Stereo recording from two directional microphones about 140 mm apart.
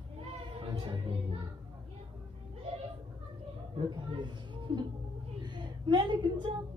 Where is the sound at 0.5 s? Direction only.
35° right (ahead or behind).